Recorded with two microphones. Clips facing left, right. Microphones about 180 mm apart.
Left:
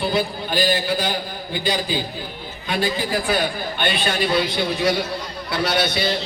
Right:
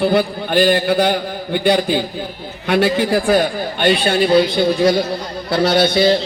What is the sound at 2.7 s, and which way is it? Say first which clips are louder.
Speech: right 8 dB; 75° right (ahead or behind).